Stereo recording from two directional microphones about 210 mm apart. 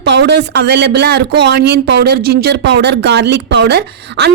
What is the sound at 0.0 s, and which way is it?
Speech, 55° right (ahead or behind).